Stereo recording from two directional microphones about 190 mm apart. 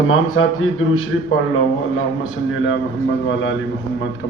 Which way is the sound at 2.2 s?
90° left.